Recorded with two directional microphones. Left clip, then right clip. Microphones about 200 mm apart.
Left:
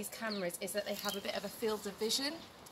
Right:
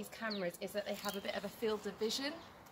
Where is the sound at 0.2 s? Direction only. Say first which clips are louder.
Left 1 dB; centre (ahead or behind).